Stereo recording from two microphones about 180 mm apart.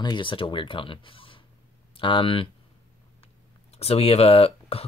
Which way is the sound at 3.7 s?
35° left (ahead or behind).